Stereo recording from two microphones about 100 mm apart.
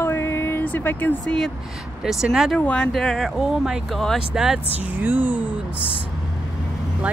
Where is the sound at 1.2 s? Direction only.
5° left (ahead or behind).